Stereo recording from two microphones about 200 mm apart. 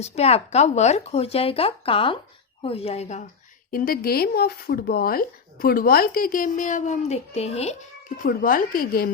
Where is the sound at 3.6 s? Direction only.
45° left (ahead or behind).